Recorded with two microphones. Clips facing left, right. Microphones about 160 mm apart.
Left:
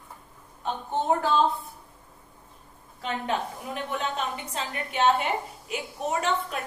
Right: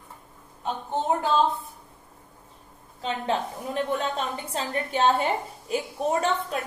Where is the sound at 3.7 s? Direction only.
35° right (ahead or behind).